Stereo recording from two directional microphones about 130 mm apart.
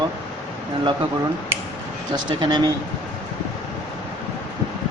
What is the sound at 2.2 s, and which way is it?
Speech, 35° right (ahead or behind).